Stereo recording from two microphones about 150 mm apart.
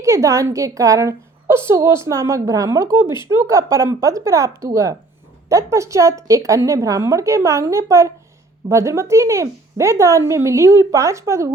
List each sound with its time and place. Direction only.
0.0 s a woman's voice: 20° right (ahead or behind)